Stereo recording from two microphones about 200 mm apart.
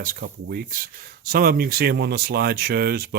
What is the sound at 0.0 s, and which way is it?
Speech, 45° right (ahead or behind).